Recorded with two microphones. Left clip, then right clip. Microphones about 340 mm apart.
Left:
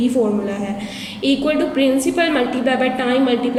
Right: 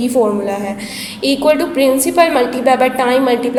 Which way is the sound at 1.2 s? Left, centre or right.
Centre.